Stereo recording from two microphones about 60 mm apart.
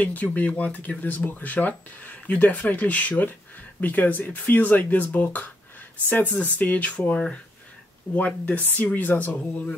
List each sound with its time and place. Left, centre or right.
0.0 s speech: left
8.5 s speech: left